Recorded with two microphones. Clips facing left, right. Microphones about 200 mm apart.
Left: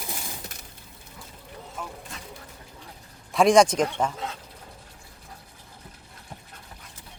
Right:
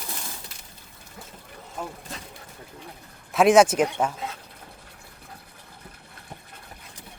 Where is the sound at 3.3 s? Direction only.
5° right (ahead or behind).